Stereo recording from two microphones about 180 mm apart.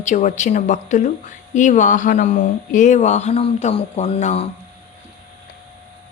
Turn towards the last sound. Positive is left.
turn(degrees=35)  # may be behind; listen again after turning